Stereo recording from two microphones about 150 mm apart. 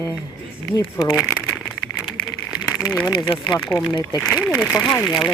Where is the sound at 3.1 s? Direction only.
35° left (ahead or behind).